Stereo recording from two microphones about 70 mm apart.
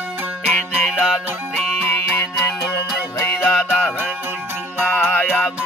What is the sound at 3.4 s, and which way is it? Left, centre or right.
Music, left.